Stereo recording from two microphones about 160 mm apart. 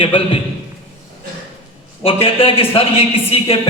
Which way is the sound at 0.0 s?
30° left (ahead or behind).